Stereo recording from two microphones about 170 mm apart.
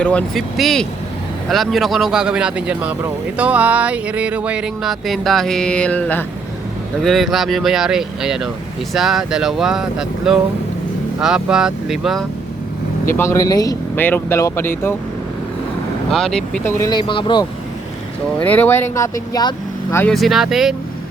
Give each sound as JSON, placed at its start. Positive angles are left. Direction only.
{"t": 0.0, "sound": "speech", "side_deg": 5}
{"t": 13.1, "sound": "speech", "side_deg": 20}
{"t": 16.1, "sound": "speech", "side_deg": 5}
{"t": 16.6, "sound": "speech", "side_deg": 20}
{"t": 18.3, "sound": "speech", "side_deg": 10}
{"t": 20.1, "sound": "speech", "side_deg": 0}